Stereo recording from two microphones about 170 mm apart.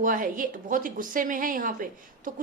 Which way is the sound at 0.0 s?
55° right (ahead or behind).